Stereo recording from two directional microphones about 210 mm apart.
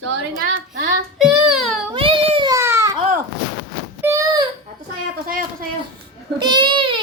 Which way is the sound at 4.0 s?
15° right (ahead or behind).